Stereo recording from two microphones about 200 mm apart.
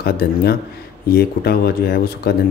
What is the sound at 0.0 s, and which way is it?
Speech, 50° left (ahead or behind).